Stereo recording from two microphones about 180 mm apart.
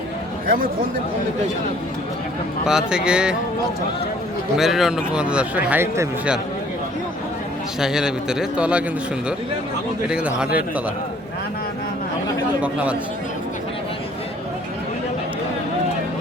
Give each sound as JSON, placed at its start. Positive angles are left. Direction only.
{"t": 0.4, "sound": "a man's voice", "side_deg": -50}
{"t": 2.6, "sound": "a man's voice", "side_deg": -5}
{"t": 4.5, "sound": "a man's voice", "side_deg": 0}
{"t": 7.8, "sound": "a man's voice", "side_deg": -5}
{"t": 10.1, "sound": "a man's voice", "side_deg": -5}
{"t": 12.6, "sound": "a man's voice", "side_deg": -5}